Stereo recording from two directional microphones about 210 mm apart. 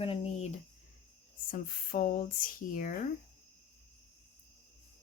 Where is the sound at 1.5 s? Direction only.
40° left (ahead or behind).